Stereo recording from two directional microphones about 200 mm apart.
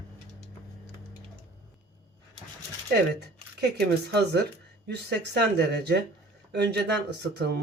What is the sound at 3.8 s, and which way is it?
Speech, 55° right (ahead or behind).